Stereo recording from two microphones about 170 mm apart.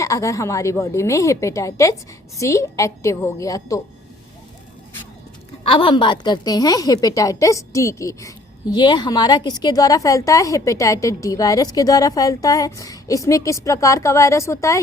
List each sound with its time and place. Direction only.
0.0 s a woman's voice: 20° left (ahead or behind)
5.6 s a woman's voice: 30° left (ahead or behind)